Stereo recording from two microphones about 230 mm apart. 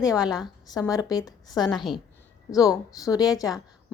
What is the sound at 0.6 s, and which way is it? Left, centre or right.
A woman's voice, centre.